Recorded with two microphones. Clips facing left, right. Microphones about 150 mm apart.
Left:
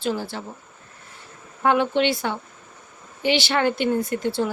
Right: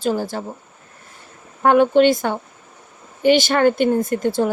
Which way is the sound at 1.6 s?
50° right (ahead or behind).